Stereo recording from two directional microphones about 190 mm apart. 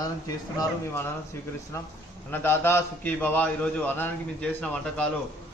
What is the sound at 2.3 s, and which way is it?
A man's voice, 10° left (ahead or behind).